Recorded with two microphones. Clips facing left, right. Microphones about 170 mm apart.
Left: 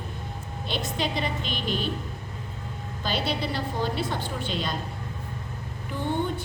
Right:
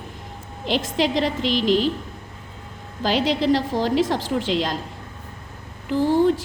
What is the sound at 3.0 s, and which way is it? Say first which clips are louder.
A woman's voice: right 9 dB; 90° right.